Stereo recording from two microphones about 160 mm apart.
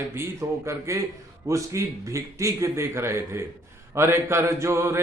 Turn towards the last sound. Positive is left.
turn(degrees=-15)  # may be behind; listen again after turning